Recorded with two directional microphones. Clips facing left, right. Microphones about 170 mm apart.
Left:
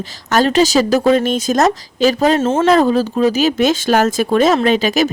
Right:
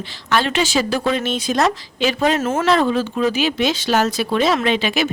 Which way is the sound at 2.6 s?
40° left (ahead or behind).